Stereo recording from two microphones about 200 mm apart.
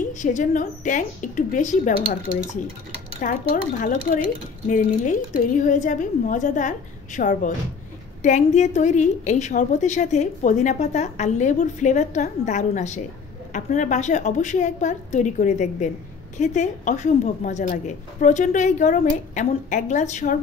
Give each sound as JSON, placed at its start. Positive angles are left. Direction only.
{"t": 0.1, "sound": "a woman's voice", "side_deg": 40}
{"t": 3.2, "sound": "a woman's voice", "side_deg": 45}